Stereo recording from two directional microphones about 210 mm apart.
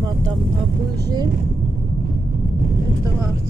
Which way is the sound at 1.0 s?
15° right (ahead or behind).